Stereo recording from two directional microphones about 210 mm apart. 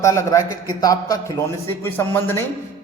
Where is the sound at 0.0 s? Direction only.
15° left (ahead or behind).